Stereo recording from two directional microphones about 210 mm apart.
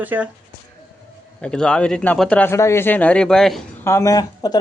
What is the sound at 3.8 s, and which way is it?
Speech, 15° left (ahead or behind).